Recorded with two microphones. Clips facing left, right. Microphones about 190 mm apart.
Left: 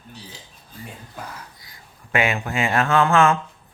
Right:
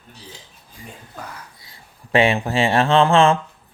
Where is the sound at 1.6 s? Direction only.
30° right (ahead or behind).